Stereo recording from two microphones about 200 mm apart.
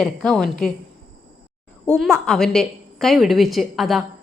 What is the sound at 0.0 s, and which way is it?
Speech, centre (ahead or behind).